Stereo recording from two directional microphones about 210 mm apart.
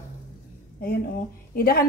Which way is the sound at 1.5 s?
45° left (ahead or behind).